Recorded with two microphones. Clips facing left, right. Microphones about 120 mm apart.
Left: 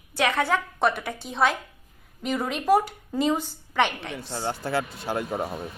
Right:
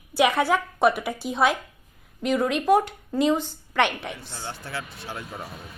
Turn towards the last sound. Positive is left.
turn(degrees=45)  # may be behind; listen again after turning